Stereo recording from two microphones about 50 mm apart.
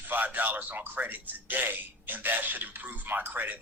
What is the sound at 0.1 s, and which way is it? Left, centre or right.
A man's voice, right.